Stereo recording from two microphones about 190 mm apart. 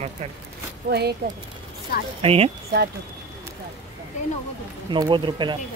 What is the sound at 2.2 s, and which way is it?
Speech, 30° right (ahead or behind).